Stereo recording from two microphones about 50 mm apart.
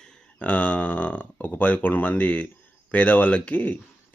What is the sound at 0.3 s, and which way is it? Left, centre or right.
Speech, left.